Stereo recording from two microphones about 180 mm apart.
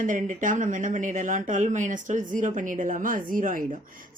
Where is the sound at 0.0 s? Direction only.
45° right (ahead or behind).